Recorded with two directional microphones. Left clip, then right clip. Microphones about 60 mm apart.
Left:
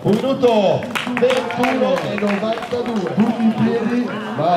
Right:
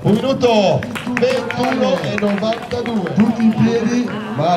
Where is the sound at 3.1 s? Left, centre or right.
Right.